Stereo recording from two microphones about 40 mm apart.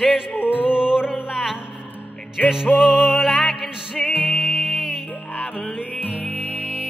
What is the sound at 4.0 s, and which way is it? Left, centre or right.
Music, left.